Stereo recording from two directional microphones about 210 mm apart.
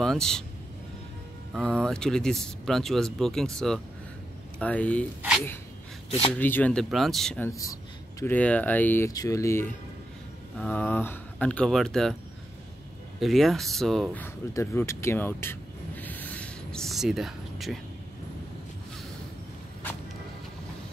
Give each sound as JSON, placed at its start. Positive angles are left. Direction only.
{"t": 0.0, "sound": "speech", "side_deg": 0}
{"t": 1.6, "sound": "speech", "side_deg": 5}
{"t": 6.0, "sound": "speech", "side_deg": 30}
{"t": 6.3, "sound": "speech", "side_deg": 10}
{"t": 13.2, "sound": "speech", "side_deg": 0}
{"t": 16.0, "sound": "a sound", "side_deg": 10}